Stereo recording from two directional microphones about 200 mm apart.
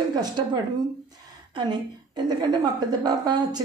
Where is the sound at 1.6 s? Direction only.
20° right (ahead or behind).